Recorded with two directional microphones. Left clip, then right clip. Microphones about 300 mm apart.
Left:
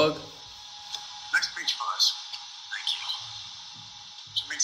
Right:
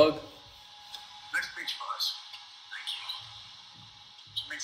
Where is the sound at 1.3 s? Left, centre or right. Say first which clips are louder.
Left 6 dB; left.